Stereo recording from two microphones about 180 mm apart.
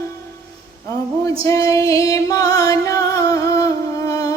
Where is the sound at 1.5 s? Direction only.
20° left (ahead or behind).